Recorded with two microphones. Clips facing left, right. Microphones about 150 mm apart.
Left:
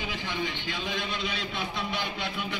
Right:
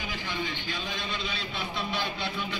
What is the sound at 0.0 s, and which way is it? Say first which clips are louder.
A man's voice: left 2 dB; 20° left (ahead or behind).